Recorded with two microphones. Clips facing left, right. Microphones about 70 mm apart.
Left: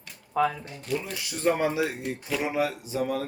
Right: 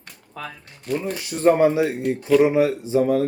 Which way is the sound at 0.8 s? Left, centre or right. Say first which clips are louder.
Right 6 dB; right.